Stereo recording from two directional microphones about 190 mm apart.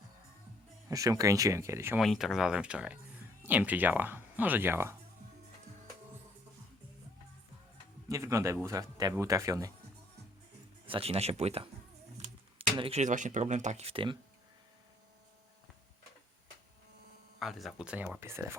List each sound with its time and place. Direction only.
0.9 s speech: 20° right (ahead or behind)
2.0 s speech: centre (ahead or behind)
8.1 s speech: 15° right (ahead or behind)
10.8 s speech: 30° right (ahead or behind)
12.1 s a sound: 35° right (ahead or behind)
12.7 s speech: 30° right (ahead or behind)
17.4 s speech: centre (ahead or behind)